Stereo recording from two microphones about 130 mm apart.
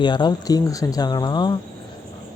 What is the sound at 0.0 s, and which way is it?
Speech, 35° left (ahead or behind).